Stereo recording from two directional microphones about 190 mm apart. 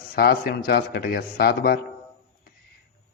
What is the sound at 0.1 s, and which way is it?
A man's voice, 55° left (ahead or behind).